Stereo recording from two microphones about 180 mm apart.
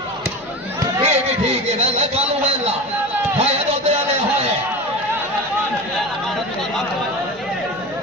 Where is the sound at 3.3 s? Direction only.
35° right (ahead or behind).